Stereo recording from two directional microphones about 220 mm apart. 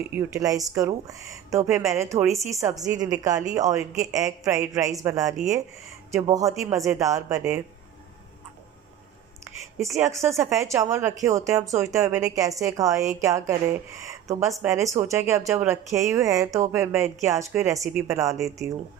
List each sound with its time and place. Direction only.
0.1 s speech: 15° right (ahead or behind)
9.4 s a sound: 15° right (ahead or behind)
10.2 s speech: 15° right (ahead or behind)